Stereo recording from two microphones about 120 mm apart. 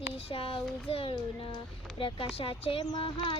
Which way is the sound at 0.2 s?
50° left (ahead or behind).